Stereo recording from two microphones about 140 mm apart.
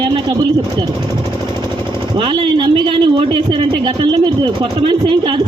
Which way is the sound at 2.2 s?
35° right (ahead or behind).